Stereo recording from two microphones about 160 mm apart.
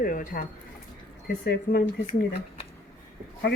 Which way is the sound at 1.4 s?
75° left (ahead or behind).